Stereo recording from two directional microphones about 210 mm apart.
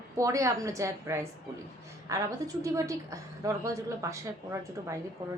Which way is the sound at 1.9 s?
15° right (ahead or behind).